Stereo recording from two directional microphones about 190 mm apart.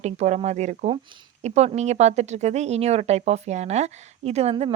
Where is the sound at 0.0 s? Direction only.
35° right (ahead or behind).